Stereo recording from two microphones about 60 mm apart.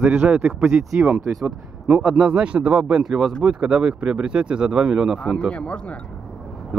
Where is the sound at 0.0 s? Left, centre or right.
Right.